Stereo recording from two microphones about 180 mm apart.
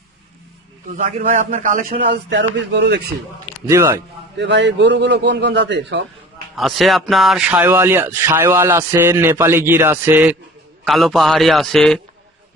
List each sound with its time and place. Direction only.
0.9 s a man's voice: 45° right (ahead or behind); by 3.0 s 70° right (ahead or behind)
3.7 s a man's voice: 15° right (ahead or behind)
4.4 s a man's voice: 75° right (ahead or behind)
6.6 s a man's voice: centre (ahead or behind)
10.8 s a man's voice: centre (ahead or behind)